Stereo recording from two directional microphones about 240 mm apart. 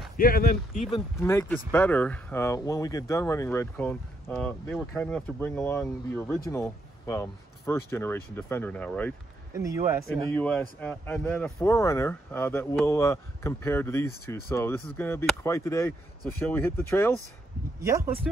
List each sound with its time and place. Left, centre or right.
0.2 s speech: left
1.2 s speech: centre
9.5 s speech: centre
10.1 s speech: centre
17.8 s speech: centre